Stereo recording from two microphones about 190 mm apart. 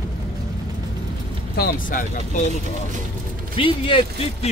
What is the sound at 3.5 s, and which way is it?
Speech, 25° left (ahead or behind).